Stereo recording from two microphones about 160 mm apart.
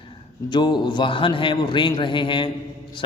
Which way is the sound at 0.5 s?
30° left (ahead or behind).